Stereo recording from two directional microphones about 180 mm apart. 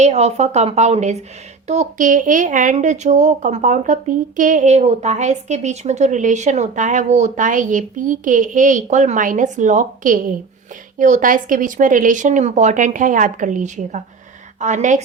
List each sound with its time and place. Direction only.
0.0 s a woman's voice: 35° right (ahead or behind)